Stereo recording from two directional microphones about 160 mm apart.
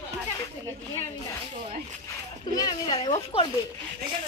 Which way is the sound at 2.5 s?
25° left (ahead or behind).